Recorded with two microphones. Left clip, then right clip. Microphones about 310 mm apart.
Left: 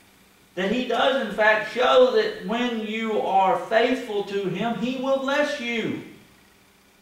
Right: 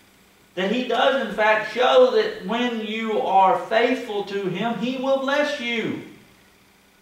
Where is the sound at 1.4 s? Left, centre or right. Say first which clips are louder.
Left 1 dB; centre.